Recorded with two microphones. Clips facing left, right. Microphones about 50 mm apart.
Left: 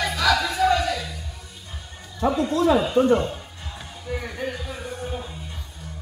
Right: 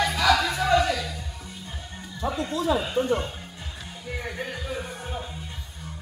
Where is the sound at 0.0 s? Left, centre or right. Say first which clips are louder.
Even; centre.